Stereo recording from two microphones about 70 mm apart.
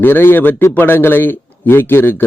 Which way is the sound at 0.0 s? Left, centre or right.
Left.